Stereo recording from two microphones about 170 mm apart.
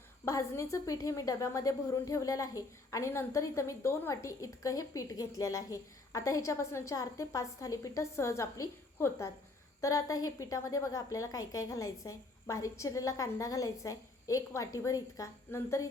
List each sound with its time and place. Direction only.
0.3 s a woman's voice: 15° left (ahead or behind)